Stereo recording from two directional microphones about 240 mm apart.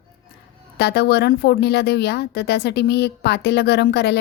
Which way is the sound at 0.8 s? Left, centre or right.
Left.